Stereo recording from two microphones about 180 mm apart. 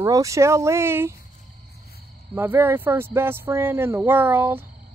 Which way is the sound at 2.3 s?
15° right (ahead or behind).